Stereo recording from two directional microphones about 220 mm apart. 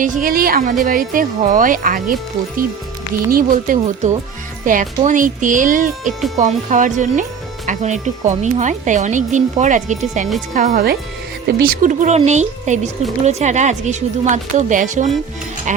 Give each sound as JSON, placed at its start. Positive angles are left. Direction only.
{"t": 0.0, "sound": "speech", "side_deg": -40}
{"t": 3.2, "sound": "speech", "side_deg": -40}